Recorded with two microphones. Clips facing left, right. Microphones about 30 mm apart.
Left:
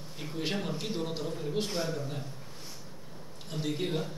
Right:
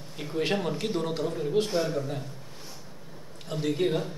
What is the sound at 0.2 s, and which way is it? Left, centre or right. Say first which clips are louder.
A man's voice: right 6 dB; centre.